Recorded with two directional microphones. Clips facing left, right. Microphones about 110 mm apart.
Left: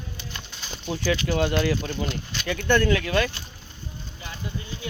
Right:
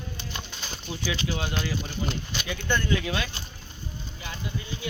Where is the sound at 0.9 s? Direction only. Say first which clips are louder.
Left 6 dB; 60° left (ahead or behind).